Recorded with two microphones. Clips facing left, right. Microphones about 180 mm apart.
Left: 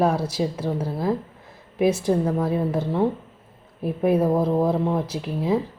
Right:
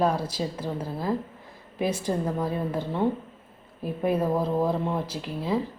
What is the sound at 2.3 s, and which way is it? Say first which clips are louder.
Speech: left 5 dB; 5° left (ahead or behind).